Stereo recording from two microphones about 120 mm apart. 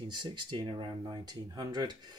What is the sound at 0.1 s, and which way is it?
Speech, 40° right (ahead or behind).